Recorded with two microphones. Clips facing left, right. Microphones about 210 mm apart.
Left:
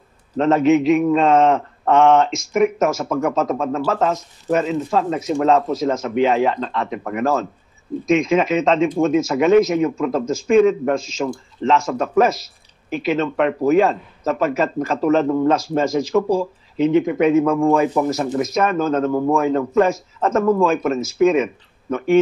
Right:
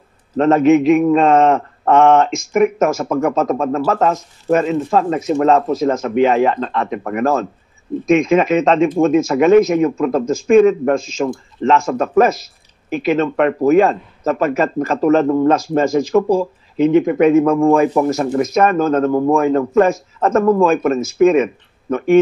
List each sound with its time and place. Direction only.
0.4 s speech: 55° right (ahead or behind)